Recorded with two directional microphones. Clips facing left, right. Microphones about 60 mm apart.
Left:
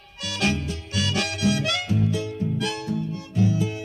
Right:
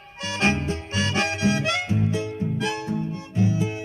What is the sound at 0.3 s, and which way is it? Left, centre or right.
Harmonica, right.